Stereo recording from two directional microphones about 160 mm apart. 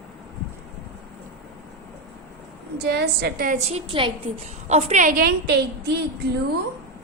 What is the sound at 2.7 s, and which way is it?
Speech, 90° right.